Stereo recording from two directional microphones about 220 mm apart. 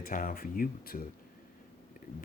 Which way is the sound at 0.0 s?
40° left (ahead or behind).